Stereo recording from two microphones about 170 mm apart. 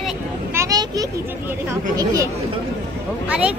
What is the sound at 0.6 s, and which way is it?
Vehicle, 20° right (ahead or behind).